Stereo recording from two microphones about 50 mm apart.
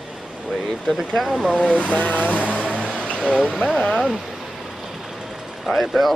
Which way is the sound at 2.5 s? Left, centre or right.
Left.